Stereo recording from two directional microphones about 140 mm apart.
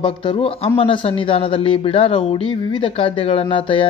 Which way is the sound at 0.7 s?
40° left (ahead or behind).